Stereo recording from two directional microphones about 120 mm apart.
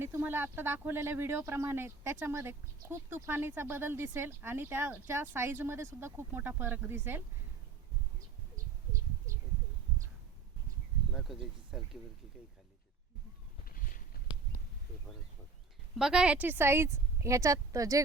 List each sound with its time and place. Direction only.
0.0 s speech: 20° right (ahead or behind)
11.1 s speech: centre (ahead or behind)
16.0 s speech: 5° right (ahead or behind); by 18.0 s 25° right (ahead or behind)